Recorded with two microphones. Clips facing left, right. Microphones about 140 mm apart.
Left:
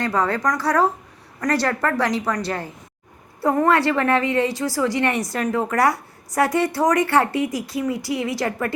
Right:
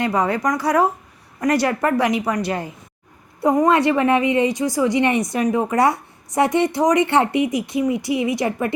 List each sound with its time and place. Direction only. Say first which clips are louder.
0.0 s a woman's voice: right 2 dB; 15° right (ahead or behind)